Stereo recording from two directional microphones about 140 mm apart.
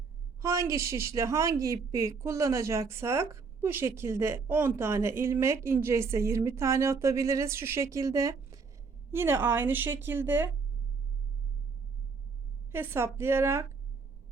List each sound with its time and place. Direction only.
0.4 s a woman's voice: 20° right (ahead or behind)
12.7 s a woman's voice: 15° right (ahead or behind)